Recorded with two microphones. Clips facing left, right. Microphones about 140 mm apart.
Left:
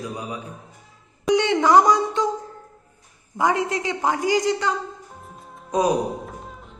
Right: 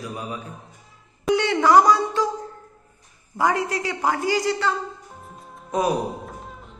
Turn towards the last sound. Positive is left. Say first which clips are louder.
# even
turn(degrees=0)  # may be behind; listen again after turning